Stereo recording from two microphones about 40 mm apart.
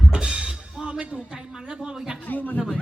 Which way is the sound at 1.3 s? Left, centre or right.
Centre.